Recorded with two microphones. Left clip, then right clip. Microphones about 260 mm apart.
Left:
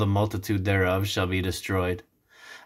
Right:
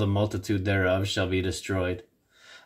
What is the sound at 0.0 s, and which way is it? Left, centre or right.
Speech, centre.